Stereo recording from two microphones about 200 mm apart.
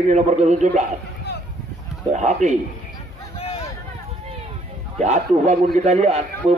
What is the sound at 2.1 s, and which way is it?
Speech, 35° right (ahead or behind).